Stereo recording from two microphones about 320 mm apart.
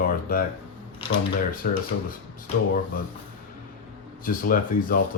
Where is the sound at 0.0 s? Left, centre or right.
Left.